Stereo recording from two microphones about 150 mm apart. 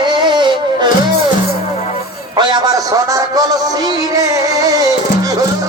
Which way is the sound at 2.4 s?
30° right (ahead or behind).